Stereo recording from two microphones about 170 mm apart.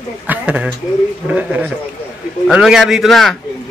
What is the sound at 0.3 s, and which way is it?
A man's voice, 10° right (ahead or behind).